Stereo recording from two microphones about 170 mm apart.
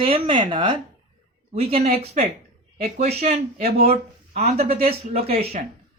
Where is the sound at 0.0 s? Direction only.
30° right (ahead or behind).